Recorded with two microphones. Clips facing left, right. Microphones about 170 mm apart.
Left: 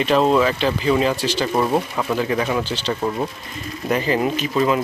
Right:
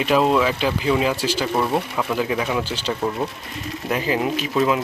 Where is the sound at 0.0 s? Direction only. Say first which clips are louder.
Left 1 dB; 5° right (ahead or behind).